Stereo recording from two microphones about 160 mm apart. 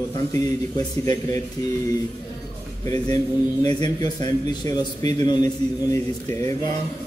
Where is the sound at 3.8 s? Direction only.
25° left (ahead or behind).